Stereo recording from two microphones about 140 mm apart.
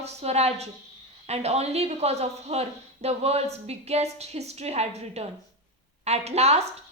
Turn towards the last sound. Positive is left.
turn(degrees=-50)  # may be behind; listen again after turning